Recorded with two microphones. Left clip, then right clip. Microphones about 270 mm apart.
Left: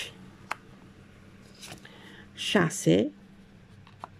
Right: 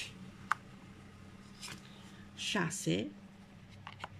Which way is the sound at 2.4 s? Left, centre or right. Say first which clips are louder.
Left 10 dB; left.